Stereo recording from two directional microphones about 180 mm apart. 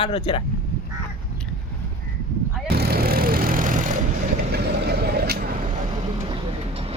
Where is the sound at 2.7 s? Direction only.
60° right (ahead or behind); by 4.0 s 45° right (ahead or behind).